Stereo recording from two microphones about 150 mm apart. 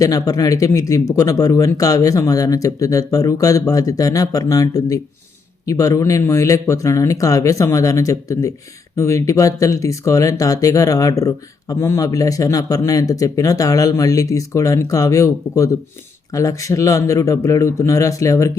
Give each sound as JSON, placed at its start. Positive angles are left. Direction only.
{"t": 0.0, "sound": "speech", "side_deg": 25}